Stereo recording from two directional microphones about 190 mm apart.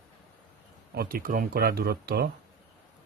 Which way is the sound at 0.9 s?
50° right (ahead or behind).